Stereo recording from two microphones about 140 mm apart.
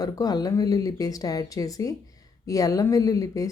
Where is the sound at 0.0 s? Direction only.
25° left (ahead or behind).